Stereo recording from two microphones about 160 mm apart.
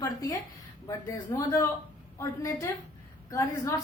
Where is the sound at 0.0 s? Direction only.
25° left (ahead or behind).